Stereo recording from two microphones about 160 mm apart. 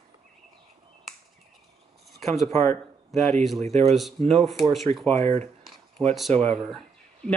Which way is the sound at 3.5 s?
40° right (ahead or behind).